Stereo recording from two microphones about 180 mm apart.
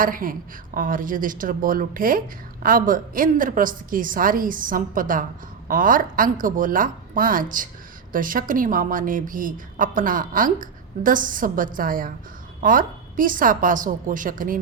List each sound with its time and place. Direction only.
0.0 s a woman's voice: 50° right (ahead or behind)